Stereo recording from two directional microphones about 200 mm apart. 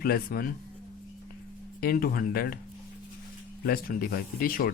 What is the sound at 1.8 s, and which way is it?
Speech, 45° left (ahead or behind).